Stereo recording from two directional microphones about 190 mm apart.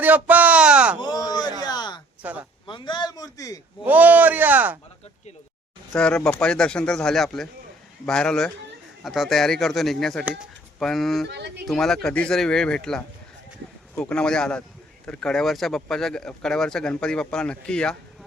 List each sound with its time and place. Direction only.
0.0 s a sound: 10° right (ahead or behind)
0.9 s a sound: 20° left (ahead or behind)
2.2 s speech: 10° right (ahead or behind)
2.6 s a man's voice: 25° left (ahead or behind)
3.8 s speech: 10° right (ahead or behind)
5.9 s speech: 5° left (ahead or behind)
11.3 s speech: 65° right (ahead or behind)
11.6 s speech: centre (ahead or behind)